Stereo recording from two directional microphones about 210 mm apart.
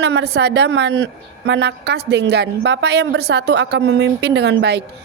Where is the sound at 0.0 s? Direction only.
50° right (ahead or behind).